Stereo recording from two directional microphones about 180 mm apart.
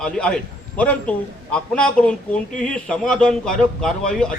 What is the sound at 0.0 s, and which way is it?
A man's voice, 5° left (ahead or behind).